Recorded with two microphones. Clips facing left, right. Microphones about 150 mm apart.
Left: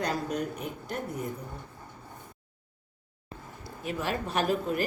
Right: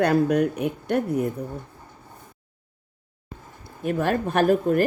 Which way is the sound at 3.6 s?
50° right (ahead or behind).